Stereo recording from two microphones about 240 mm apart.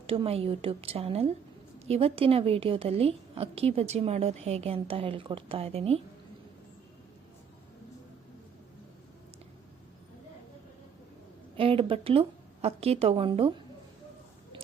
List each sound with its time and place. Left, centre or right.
0.1 s a woman's voice: right
11.5 s a woman's voice: right